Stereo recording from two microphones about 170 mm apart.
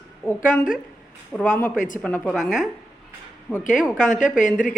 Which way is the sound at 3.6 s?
50° left (ahead or behind).